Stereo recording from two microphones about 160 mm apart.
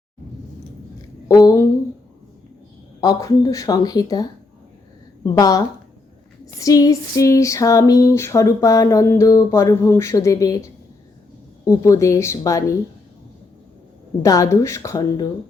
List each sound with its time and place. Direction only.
1.3 s a sound: 20° left (ahead or behind)
3.0 s speech: 20° left (ahead or behind)
14.2 s speech: 20° left (ahead or behind)